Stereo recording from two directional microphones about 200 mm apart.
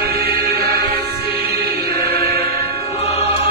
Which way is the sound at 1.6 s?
55° right (ahead or behind).